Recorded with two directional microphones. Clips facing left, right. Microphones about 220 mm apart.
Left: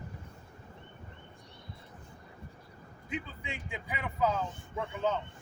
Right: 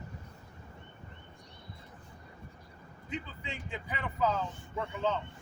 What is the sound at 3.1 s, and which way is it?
Speech, 10° left (ahead or behind).